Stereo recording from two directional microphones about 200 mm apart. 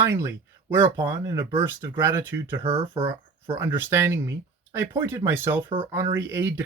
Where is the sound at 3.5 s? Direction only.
10° right (ahead or behind).